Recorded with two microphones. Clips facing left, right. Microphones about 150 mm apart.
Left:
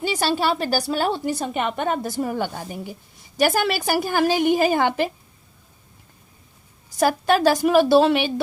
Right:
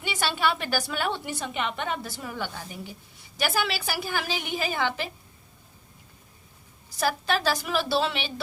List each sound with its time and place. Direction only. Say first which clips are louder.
0.0 s a woman's voice: left 5 dB; 40° left (ahead or behind)
7.0 s a woman's voice: left 8 dB; 45° left (ahead or behind)